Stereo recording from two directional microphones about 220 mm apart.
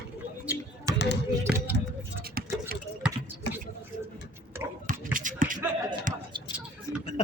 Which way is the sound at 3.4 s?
50° left (ahead or behind).